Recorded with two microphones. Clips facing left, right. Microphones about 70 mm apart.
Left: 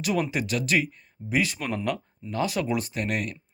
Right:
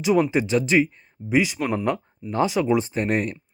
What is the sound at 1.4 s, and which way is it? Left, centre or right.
Speech, centre.